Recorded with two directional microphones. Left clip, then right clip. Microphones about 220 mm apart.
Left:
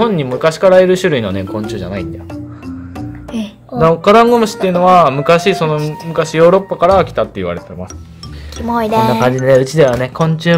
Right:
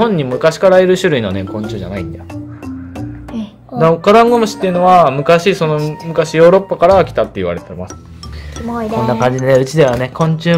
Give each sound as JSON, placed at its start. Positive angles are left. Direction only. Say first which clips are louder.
{"t": 0.0, "sound": "speech", "louder": "right 1 dB", "side_deg": 0}
{"t": 3.3, "sound": "a sound", "louder": "left 3 dB", "side_deg": 50}
{"t": 3.7, "sound": "speech", "louder": "even", "side_deg": 0}
{"t": 9.2, "sound": "speech", "louder": "left 1 dB", "side_deg": 5}